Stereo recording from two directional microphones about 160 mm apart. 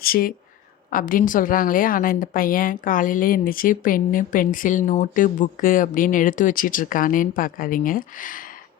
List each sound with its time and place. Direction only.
0.0 s a woman's voice: 65° left (ahead or behind)